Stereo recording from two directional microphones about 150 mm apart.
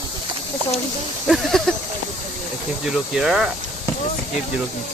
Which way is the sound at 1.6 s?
5° left (ahead or behind).